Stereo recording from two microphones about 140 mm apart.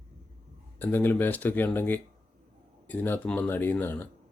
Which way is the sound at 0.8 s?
15° left (ahead or behind).